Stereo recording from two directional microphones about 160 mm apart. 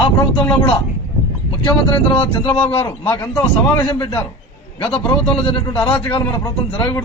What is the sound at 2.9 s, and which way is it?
Speech, 15° left (ahead or behind).